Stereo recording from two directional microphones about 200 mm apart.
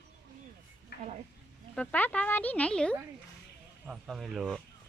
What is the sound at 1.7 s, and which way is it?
A child's voice, 10° left (ahead or behind).